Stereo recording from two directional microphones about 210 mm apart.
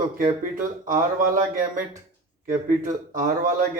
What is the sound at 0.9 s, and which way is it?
A man's voice, 40° right (ahead or behind).